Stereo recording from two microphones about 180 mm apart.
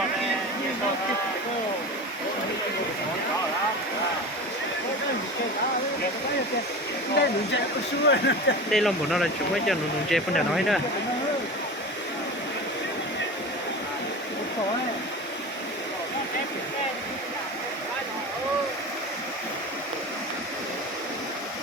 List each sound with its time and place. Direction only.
8.0 s speech: 75° left (ahead or behind)
8.7 s speech: centre (ahead or behind)